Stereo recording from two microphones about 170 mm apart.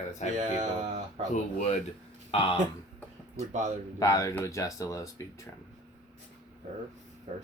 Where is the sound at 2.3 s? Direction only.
30° left (ahead or behind).